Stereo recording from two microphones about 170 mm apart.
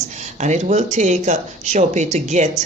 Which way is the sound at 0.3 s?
45° right (ahead or behind).